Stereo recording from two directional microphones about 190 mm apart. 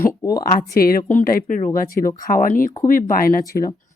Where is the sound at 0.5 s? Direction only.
50° left (ahead or behind).